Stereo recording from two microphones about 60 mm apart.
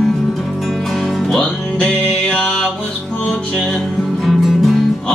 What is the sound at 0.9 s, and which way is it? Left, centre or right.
Music, centre.